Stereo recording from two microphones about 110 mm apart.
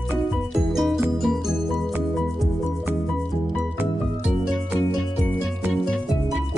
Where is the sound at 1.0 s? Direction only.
5° right (ahead or behind).